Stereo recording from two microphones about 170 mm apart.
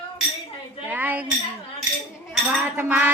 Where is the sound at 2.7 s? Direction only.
10° right (ahead or behind).